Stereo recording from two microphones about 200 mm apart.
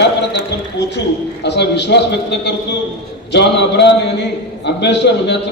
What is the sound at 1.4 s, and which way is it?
A man's voice, 60° left (ahead or behind).